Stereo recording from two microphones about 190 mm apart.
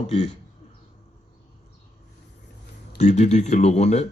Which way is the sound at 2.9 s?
35° left (ahead or behind).